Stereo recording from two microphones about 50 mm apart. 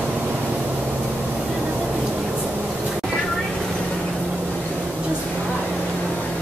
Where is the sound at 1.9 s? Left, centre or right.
Right.